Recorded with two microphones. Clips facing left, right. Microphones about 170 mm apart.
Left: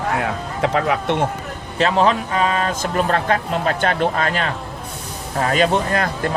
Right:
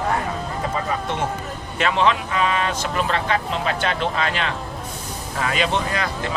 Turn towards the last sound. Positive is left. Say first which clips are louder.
# left 4 dB
turn(degrees=50)  # may be behind; listen again after turning